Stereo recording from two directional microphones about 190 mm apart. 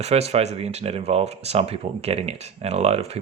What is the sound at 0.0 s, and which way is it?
Speech, 35° right (ahead or behind).